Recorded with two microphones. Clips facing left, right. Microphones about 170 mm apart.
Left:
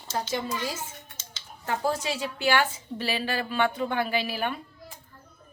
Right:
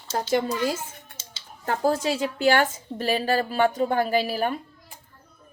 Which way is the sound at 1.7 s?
45° right (ahead or behind).